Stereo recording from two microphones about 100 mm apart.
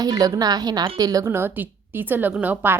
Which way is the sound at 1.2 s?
25° right (ahead or behind).